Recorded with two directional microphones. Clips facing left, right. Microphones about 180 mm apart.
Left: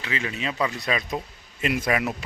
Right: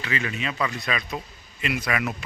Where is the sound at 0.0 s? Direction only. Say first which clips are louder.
Even; 25° left (ahead or behind).